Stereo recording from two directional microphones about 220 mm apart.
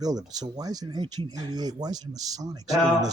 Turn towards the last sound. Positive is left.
turn(degrees=-15)  # may be behind; listen again after turning